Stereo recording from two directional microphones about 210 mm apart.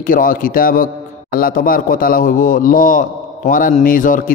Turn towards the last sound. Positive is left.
turn(degrees=40)  # may be behind; listen again after turning